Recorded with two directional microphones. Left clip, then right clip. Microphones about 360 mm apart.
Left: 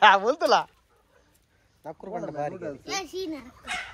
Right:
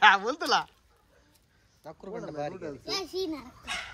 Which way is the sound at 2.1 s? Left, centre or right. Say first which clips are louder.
Left 4 dB; centre.